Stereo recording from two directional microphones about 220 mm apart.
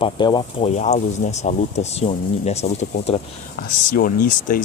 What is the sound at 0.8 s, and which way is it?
Speech, 30° left (ahead or behind).